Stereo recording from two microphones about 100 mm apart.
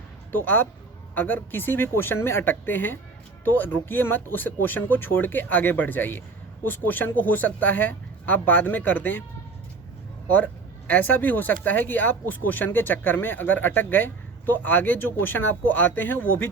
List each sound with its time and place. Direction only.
0.3 s speech: 20° left (ahead or behind)
10.2 s speech: 15° left (ahead or behind)